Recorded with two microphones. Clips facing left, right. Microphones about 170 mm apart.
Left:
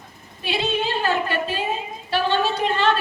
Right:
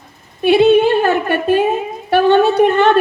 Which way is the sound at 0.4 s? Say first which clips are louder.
Right 15 dB; 55° right (ahead or behind).